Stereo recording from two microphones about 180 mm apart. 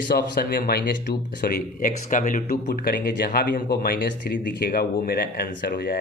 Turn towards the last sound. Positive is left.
turn(degrees=60)  # may be behind; listen again after turning